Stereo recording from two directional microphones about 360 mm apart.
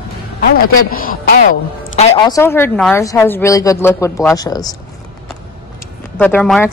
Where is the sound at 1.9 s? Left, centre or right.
Centre.